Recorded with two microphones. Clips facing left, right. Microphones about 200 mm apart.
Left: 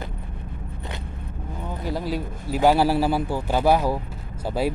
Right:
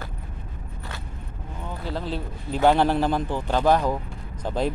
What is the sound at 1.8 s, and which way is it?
A man's voice, 10° left (ahead or behind).